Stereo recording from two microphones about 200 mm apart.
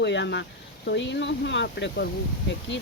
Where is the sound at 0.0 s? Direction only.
60° left (ahead or behind).